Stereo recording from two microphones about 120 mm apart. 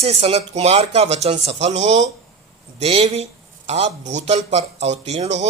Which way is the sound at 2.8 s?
60° right (ahead or behind).